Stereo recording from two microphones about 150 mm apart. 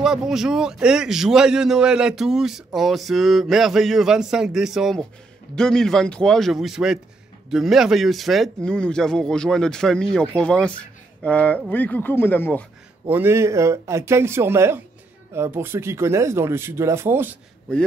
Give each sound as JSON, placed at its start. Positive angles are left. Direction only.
{"t": 0.0, "sound": "a man's voice", "side_deg": -5}
{"t": 13.1, "sound": "speech", "side_deg": -15}